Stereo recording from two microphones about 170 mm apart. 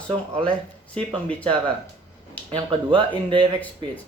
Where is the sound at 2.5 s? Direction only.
30° right (ahead or behind).